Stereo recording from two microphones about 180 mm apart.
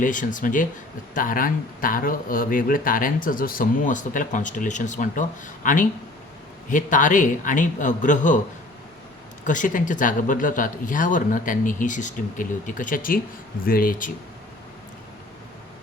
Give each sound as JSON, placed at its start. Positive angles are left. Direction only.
{"t": 0.0, "sound": "speech", "side_deg": 45}
{"t": 9.4, "sound": "speech", "side_deg": 45}